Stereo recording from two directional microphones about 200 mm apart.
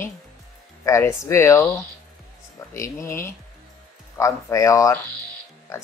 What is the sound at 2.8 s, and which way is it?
Speech, 15° left (ahead or behind).